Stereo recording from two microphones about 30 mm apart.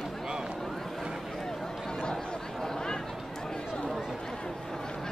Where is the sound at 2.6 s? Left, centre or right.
Centre.